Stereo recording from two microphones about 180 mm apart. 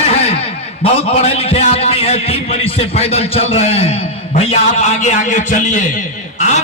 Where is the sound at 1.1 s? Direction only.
35° left (ahead or behind).